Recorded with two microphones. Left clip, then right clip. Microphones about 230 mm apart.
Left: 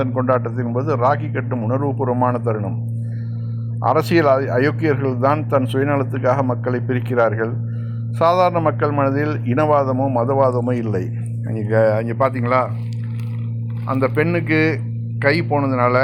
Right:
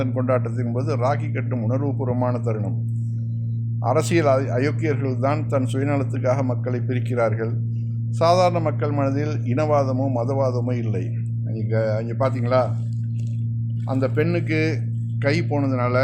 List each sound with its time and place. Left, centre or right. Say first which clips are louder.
0.0 s speech: left 4 dB; centre
3.8 s speech: left 4 dB; centre
13.8 s speech: left 4 dB; centre